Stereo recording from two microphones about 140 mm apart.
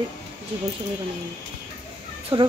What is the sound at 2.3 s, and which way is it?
Speech, 35° right (ahead or behind).